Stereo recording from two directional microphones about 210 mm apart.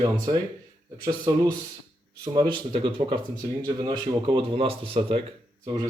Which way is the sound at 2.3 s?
25° right (ahead or behind).